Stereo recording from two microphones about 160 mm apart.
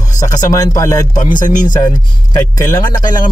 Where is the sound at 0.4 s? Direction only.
20° left (ahead or behind).